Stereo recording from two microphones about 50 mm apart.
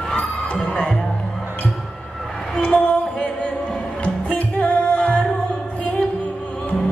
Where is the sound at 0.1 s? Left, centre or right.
Left.